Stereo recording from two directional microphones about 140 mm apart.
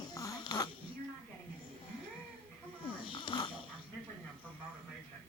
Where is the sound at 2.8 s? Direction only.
35° left (ahead or behind).